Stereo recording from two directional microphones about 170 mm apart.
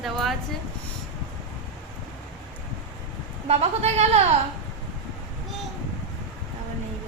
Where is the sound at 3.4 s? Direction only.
35° right (ahead or behind).